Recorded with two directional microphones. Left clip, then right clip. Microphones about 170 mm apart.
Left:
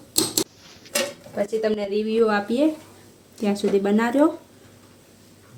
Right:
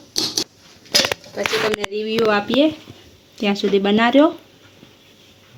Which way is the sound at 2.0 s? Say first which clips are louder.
Right 4 dB; 55° right (ahead or behind).